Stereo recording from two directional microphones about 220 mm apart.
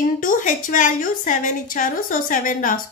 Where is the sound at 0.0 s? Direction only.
35° left (ahead or behind).